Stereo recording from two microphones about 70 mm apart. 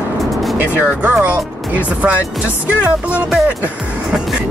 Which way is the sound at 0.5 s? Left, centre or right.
Right.